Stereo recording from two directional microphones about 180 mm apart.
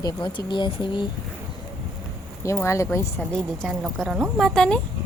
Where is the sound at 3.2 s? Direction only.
5° left (ahead or behind).